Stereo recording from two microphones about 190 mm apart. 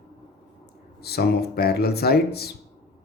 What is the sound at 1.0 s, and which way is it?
Speech, 55° left (ahead or behind).